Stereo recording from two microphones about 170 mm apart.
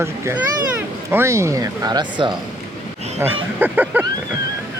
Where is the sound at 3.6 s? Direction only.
10° right (ahead or behind).